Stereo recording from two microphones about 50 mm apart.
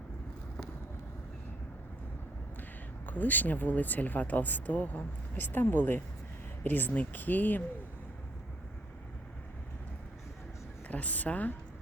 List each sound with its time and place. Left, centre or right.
3.1 s speech: left
10.8 s a woman's voice: left